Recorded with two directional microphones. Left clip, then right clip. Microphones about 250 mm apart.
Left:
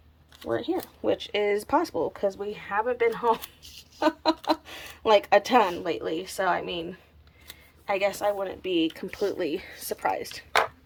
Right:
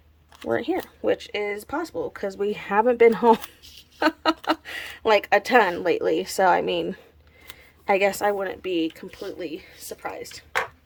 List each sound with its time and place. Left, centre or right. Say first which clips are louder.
0.3 s speech: right 4 dB; centre
2.2 s speech: right 2 dB; centre